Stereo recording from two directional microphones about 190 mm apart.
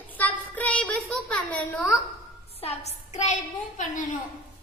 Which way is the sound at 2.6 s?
35° left (ahead or behind).